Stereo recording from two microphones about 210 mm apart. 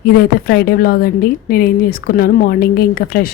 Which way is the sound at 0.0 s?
45° left (ahead or behind).